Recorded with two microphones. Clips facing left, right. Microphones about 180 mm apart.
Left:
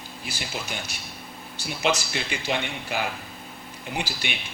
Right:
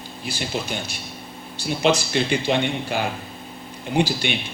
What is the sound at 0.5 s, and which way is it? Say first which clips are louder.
Speech: right 7 dB; 30° right (ahead or behind).